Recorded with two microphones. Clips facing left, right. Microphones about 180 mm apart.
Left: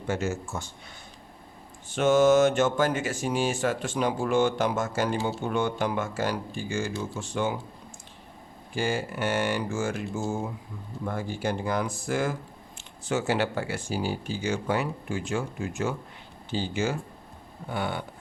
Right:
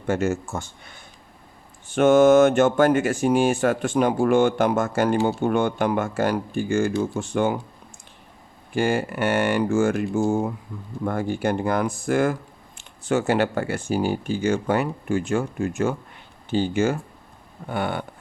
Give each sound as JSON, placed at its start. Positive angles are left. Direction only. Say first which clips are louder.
{"t": 0.1, "sound": "speech", "louder": "right 6 dB", "side_deg": -55}
{"t": 8.7, "sound": "speech", "louder": "right 6 dB", "side_deg": -55}